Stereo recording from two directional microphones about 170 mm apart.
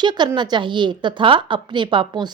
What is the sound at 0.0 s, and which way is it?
A woman's voice, 25° right (ahead or behind).